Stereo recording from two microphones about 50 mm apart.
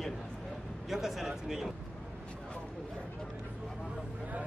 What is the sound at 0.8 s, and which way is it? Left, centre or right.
Speech, centre.